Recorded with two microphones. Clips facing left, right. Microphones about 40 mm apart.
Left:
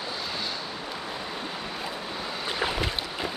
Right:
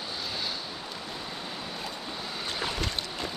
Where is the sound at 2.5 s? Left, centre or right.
Centre.